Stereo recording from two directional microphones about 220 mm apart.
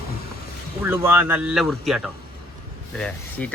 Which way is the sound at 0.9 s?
10° right (ahead or behind).